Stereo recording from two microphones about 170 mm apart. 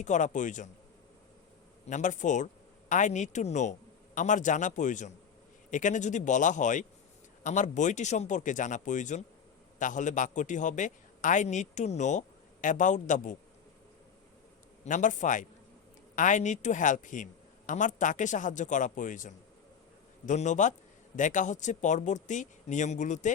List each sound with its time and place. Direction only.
0.0 s a man's voice: 45° left (ahead or behind)
1.9 s a man's voice: 45° left (ahead or behind)
14.8 s a man's voice: 50° left (ahead or behind)